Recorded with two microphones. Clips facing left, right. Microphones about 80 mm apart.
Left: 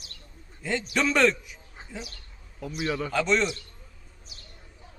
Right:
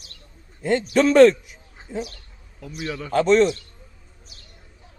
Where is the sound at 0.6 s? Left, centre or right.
Right.